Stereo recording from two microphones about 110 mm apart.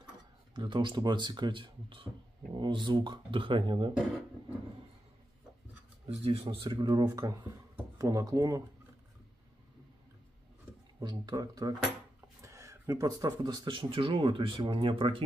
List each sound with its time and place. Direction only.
0.6 s speech: 45° right (ahead or behind)
6.0 s a man's voice: 65° right (ahead or behind)
6.8 s speech: 35° right (ahead or behind)
11.0 s speech: 40° right (ahead or behind)